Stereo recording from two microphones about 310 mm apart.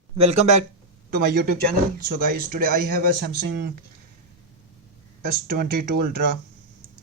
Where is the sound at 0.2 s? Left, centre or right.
Centre.